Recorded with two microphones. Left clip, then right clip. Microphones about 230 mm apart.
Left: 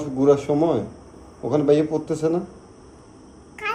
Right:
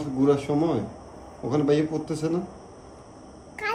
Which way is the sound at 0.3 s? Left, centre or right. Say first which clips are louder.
Left 6 dB; centre.